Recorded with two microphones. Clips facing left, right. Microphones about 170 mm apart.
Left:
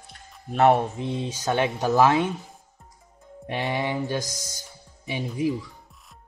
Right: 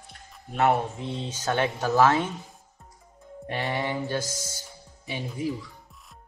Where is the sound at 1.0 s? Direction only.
15° left (ahead or behind).